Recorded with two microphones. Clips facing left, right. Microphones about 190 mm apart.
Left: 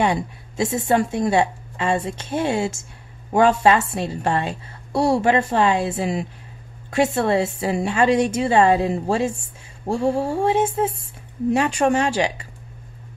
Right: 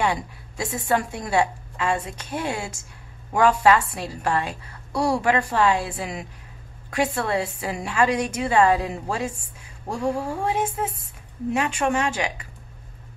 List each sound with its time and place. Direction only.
0.0 s a woman's voice: 20° left (ahead or behind)